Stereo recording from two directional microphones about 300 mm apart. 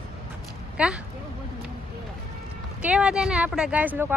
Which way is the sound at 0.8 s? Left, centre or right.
Centre.